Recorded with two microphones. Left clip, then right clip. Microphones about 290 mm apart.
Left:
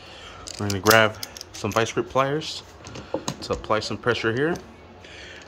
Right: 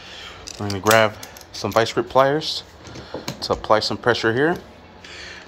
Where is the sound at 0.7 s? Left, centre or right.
Centre.